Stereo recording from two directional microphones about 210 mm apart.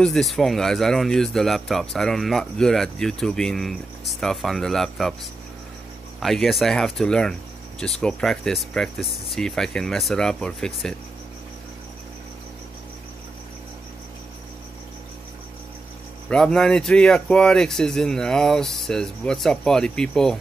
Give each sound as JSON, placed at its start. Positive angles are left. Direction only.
{"t": 0.0, "sound": "speech", "side_deg": 0}
{"t": 6.1, "sound": "speech", "side_deg": 0}
{"t": 16.3, "sound": "speech", "side_deg": 5}